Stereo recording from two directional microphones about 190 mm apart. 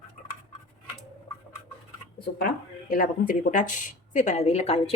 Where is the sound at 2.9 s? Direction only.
45° left (ahead or behind).